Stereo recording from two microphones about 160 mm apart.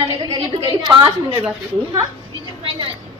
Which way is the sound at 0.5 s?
30° right (ahead or behind).